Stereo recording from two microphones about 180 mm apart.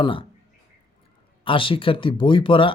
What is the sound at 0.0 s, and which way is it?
Speech, 30° left (ahead or behind).